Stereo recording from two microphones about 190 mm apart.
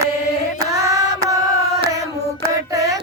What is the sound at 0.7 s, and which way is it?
Female singing, 15° right (ahead or behind).